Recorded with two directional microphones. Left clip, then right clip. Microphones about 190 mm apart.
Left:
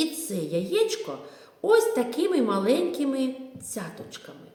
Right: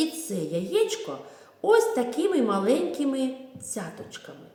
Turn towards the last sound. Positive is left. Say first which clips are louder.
# even
turn(degrees=0)  # may be behind; listen again after turning